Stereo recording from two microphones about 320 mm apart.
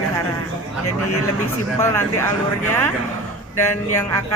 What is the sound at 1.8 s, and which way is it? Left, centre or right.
Speech, centre.